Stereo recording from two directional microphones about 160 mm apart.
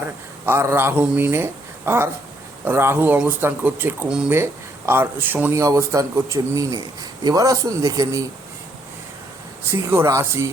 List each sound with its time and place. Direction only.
0.4 s a man's voice: 15° right (ahead or behind)
9.6 s speech: 15° right (ahead or behind)